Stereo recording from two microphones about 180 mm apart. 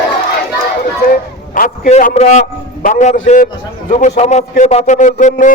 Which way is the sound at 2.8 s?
45° left (ahead or behind).